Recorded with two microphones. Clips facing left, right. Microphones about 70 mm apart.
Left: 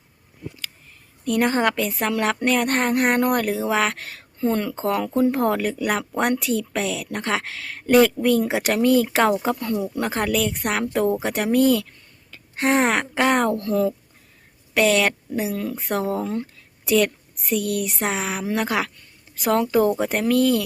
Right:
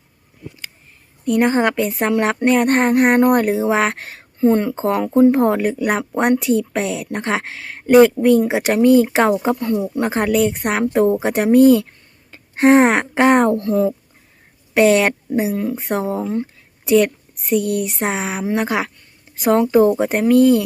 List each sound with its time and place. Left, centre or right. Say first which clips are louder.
1.2 s a woman's voice: right 4 dB; centre